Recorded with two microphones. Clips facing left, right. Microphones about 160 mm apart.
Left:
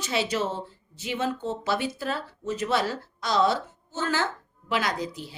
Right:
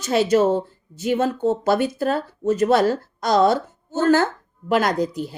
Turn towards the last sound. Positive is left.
turn(degrees=-50)  # may be behind; listen again after turning